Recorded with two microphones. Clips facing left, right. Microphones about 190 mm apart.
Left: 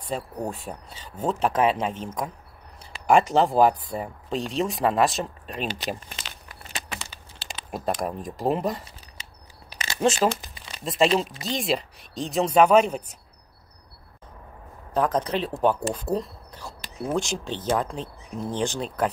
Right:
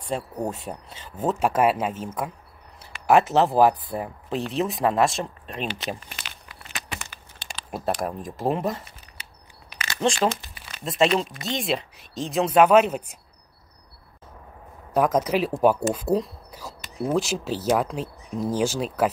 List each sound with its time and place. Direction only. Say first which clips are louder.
0.0 s speech: right 2 dB; 10° right (ahead or behind)
6.1 s a sound: left 1 dB; 35° left (ahead or behind)
7.7 s speech: right 1 dB; centre (ahead or behind)
9.9 s speech: left 1 dB; 10° left (ahead or behind); by 13.2 s 10° right (ahead or behind)
15.0 s speech: right 3 dB; 10° right (ahead or behind)